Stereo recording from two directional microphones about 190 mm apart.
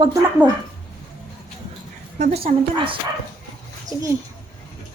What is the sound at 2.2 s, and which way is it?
Speech, 35° right (ahead or behind).